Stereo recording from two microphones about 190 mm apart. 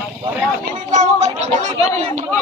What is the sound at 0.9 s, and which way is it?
Speech, 40° right (ahead or behind).